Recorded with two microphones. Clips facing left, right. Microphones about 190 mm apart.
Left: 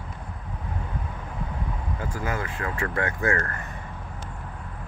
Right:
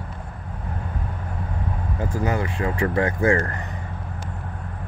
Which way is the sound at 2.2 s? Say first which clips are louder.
Right 6 dB; 20° right (ahead or behind).